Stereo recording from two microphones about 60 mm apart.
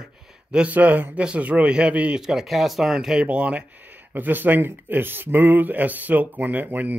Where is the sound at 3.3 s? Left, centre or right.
Right.